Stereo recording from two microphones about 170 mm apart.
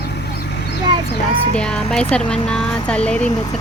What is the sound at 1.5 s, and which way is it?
Speech, 5° left (ahead or behind).